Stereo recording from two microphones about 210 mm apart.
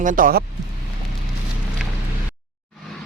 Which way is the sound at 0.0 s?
40° right (ahead or behind).